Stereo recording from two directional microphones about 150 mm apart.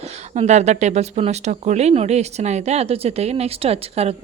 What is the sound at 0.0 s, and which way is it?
Speech, 50° right (ahead or behind).